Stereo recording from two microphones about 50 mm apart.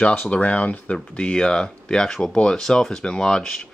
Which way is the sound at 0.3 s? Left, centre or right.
Left.